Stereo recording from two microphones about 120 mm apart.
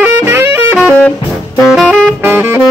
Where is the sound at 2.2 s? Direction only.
15° right (ahead or behind).